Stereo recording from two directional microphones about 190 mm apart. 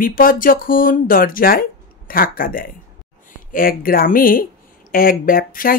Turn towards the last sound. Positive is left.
turn(degrees=50)  # may be behind; listen again after turning